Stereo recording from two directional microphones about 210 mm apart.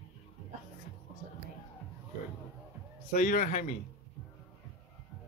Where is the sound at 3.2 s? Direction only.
40° left (ahead or behind).